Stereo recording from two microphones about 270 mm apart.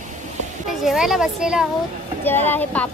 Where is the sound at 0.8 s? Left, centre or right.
Centre.